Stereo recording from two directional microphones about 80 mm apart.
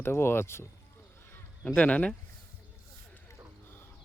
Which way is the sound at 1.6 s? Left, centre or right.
Centre.